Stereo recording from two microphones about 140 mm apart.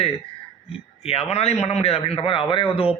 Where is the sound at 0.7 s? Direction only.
45° left (ahead or behind).